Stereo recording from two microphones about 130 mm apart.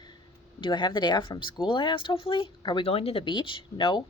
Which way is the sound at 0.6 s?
40° left (ahead or behind).